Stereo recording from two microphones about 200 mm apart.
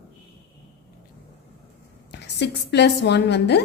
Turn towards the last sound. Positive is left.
turn(degrees=55)  # may be behind; listen again after turning